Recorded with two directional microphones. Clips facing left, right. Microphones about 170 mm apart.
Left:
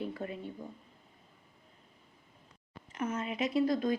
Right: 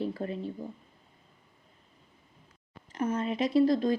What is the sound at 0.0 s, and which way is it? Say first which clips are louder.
Speech: right 5 dB; 35° right (ahead or behind).